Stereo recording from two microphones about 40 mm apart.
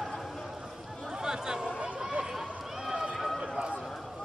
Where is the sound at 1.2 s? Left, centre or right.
Centre.